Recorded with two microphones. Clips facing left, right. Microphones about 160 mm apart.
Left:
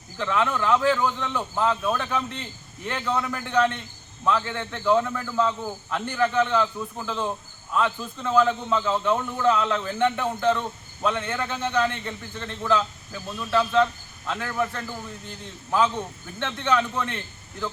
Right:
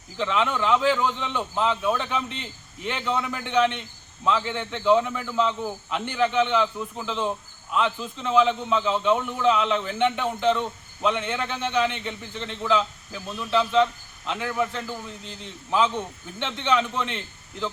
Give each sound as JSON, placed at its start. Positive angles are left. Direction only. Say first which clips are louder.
{"t": 0.2, "sound": "a man's voice", "louder": "even", "side_deg": -20}
{"t": 1.7, "sound": "a man's voice", "louder": "even", "side_deg": -5}
{"t": 16.4, "sound": "a man's voice", "louder": "even", "side_deg": -15}